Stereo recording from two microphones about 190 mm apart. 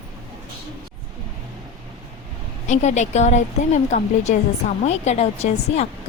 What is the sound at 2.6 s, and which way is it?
Speech, 35° left (ahead or behind).